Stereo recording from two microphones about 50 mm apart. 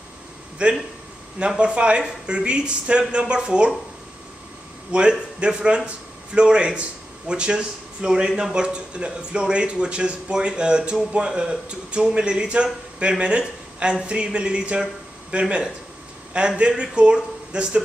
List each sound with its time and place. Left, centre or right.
0.6 s speech: right
5.4 s speech: centre